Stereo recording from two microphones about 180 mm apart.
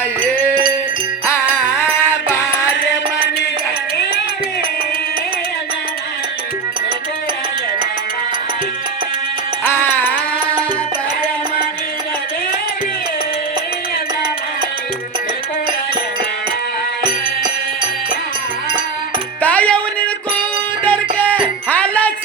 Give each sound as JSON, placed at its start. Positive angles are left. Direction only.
{"t": 0.3, "sound": "music", "side_deg": 10}
{"t": 9.6, "sound": "music", "side_deg": 10}
{"t": 17.0, "sound": "music", "side_deg": -25}
{"t": 19.4, "sound": "music", "side_deg": 10}